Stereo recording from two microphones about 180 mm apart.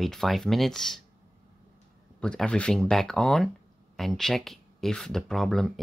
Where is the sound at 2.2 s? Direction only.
5° left (ahead or behind).